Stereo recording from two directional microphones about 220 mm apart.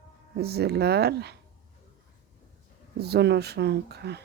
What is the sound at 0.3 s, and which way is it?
A woman's voice, 45° right (ahead or behind).